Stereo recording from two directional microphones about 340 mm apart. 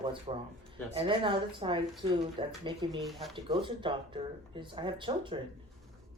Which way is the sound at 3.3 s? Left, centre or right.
Centre.